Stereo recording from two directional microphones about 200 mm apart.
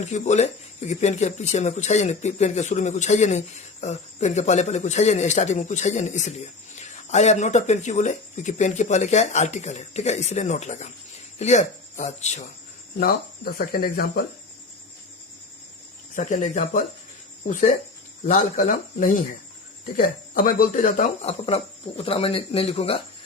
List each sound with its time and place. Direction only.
0.0 s speech: 35° left (ahead or behind)
13.0 s speech: 45° left (ahead or behind)
16.1 s speech: 35° left (ahead or behind)